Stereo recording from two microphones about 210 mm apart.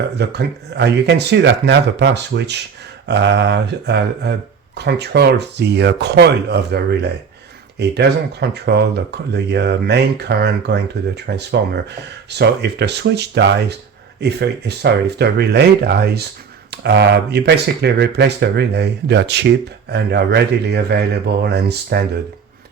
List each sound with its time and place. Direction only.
0.2 s speech: 55° right (ahead or behind)